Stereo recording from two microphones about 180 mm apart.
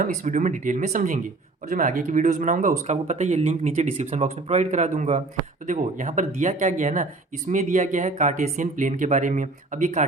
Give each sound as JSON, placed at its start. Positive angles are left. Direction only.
{"t": 0.0, "sound": "speech", "side_deg": -45}